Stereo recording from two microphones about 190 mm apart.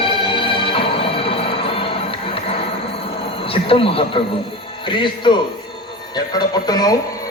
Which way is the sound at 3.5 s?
30° left (ahead or behind).